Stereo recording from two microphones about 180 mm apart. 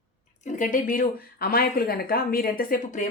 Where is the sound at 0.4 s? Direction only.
45° left (ahead or behind).